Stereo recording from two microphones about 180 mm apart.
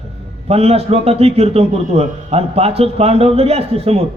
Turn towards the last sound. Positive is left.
turn(degrees=-35)  # may be behind; listen again after turning